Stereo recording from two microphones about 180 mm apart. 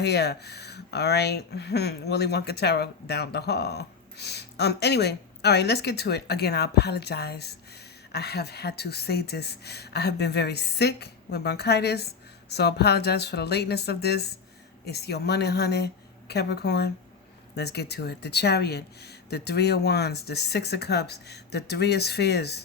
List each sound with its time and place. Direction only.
0.0 s speech: 65° left (ahead or behind)